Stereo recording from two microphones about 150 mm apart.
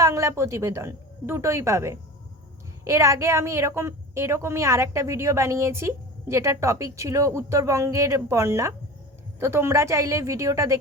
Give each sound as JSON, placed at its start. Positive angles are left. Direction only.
{"t": 0.0, "sound": "a woman's voice", "side_deg": -20}